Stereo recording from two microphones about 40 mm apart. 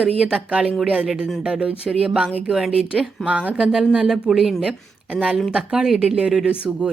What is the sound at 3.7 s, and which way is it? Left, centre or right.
Speech, centre.